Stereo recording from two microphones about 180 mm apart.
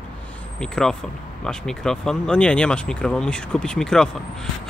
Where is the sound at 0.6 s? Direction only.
5° left (ahead or behind).